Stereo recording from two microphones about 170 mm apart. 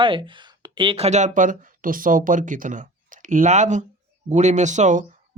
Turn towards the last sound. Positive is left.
turn(degrees=-45)  # may be behind; listen again after turning